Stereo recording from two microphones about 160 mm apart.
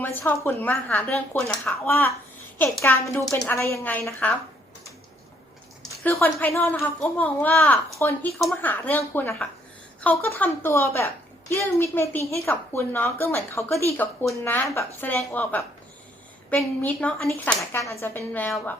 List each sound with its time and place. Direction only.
0.0 s a woman's voice: 10° left (ahead or behind)
3.2 s a woman's voice: centre (ahead or behind)
3.5 s speech: 15° left (ahead or behind)
6.0 s speech: 15° left (ahead or behind)
17.7 s speech: 15° left (ahead or behind)